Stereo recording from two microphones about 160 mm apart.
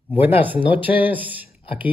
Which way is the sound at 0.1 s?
10° right (ahead or behind).